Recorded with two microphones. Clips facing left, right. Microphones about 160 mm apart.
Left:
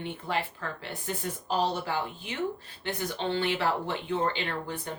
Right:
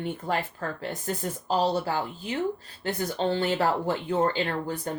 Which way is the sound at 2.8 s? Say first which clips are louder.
Right 4 dB; 40° right (ahead or behind).